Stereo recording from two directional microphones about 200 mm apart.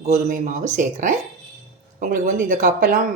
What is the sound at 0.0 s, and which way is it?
Speech, 35° right (ahead or behind).